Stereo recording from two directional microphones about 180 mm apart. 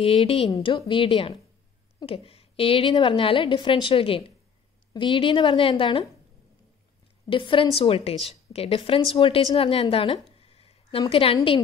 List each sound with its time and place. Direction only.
0.0 s a woman's voice: 30° left (ahead or behind)
7.2 s a woman's voice: 25° left (ahead or behind)